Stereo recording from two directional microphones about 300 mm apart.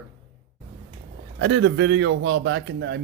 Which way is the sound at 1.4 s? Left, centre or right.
Right.